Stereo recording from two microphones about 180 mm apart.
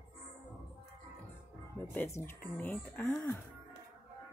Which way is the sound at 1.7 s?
10° left (ahead or behind).